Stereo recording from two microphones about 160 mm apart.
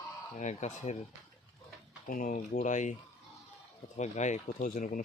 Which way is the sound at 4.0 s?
45° left (ahead or behind).